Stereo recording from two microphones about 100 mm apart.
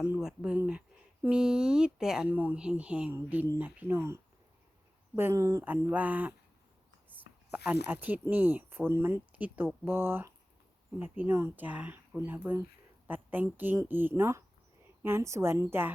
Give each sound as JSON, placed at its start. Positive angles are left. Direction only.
{"t": 0.0, "sound": "speech", "side_deg": -10}
{"t": 5.9, "sound": "a woman's voice", "side_deg": -15}